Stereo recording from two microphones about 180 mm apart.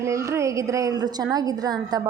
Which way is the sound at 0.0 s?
15° right (ahead or behind).